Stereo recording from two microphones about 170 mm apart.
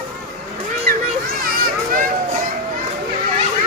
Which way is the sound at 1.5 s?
55° right (ahead or behind).